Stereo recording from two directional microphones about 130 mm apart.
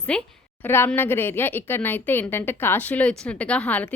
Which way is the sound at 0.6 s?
20° left (ahead or behind).